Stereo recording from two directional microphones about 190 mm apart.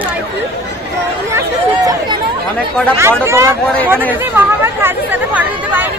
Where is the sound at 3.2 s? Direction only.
15° right (ahead or behind).